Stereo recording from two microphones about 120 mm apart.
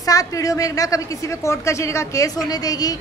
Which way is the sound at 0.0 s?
30° left (ahead or behind).